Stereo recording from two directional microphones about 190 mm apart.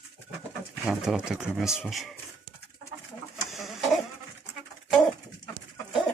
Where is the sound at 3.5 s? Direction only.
Centre (ahead or behind).